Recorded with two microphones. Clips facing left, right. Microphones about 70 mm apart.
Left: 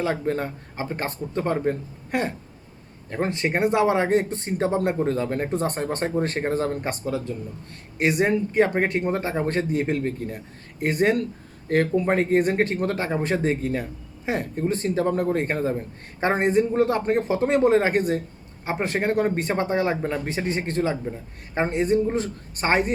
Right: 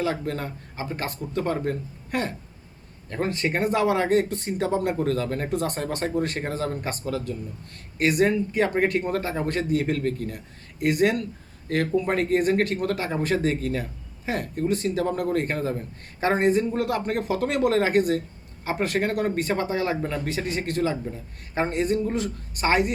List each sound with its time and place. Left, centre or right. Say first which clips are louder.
0.0 s speech: left 2 dB; left